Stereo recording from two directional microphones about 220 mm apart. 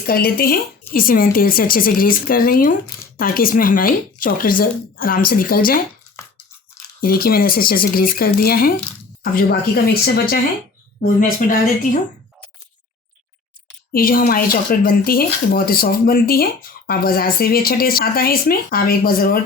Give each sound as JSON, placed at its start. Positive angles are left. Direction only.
{"t": 0.1, "sound": "speech", "side_deg": 45}
{"t": 7.0, "sound": "speech", "side_deg": 40}
{"t": 13.9, "sound": "speech", "side_deg": 40}